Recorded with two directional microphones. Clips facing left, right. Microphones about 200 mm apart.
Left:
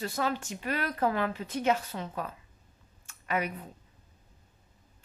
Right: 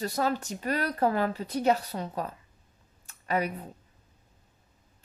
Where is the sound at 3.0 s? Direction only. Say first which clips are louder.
Right 3 dB; 35° right (ahead or behind).